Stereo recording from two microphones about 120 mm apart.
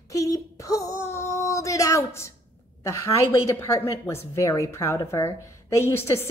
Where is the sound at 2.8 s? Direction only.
25° left (ahead or behind).